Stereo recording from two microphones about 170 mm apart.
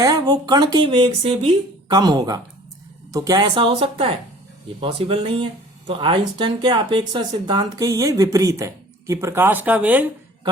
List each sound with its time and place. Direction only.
0.0 s speech: 25° right (ahead or behind)
1.9 s speech: 25° right (ahead or behind); by 10.1 s 10° right (ahead or behind)